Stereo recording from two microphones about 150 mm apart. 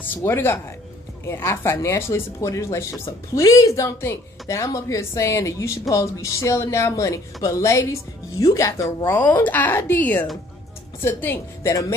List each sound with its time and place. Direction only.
0.0 s speech: 15° left (ahead or behind)